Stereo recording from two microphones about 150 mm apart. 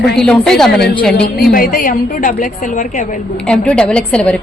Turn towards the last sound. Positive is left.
turn(degrees=5)  # may be behind; listen again after turning